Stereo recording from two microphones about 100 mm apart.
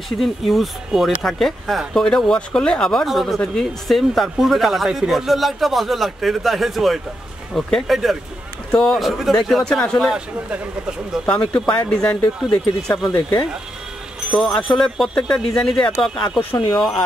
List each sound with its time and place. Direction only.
0.2 s speech: centre (ahead or behind)
11.2 s speech: 10° left (ahead or behind)
13.1 s speech: 20° left (ahead or behind)
14.3 s speech: 5° left (ahead or behind)
16.5 s speech: 40° left (ahead or behind)